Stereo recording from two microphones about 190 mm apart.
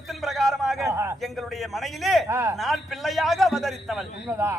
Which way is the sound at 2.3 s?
15° right (ahead or behind).